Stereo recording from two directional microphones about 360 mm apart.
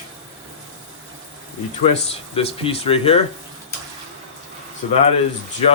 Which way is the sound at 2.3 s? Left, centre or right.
Centre.